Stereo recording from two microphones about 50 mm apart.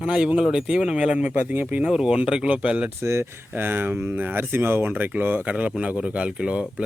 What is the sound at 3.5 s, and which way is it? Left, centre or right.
Speech, right.